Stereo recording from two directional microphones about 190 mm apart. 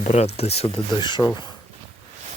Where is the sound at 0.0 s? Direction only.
35° left (ahead or behind).